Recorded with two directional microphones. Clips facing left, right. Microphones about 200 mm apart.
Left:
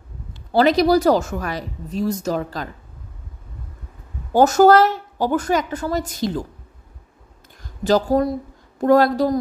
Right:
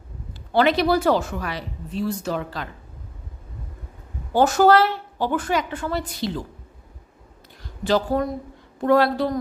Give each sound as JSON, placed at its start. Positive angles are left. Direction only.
{"t": 0.5, "sound": "speech", "side_deg": 40}
{"t": 4.3, "sound": "a woman's voice", "side_deg": 45}
{"t": 7.6, "sound": "a woman's voice", "side_deg": 40}